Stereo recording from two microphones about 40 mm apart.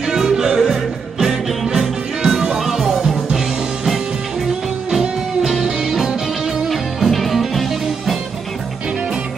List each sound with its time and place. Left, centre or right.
0.1 s music: centre
5.4 s music: centre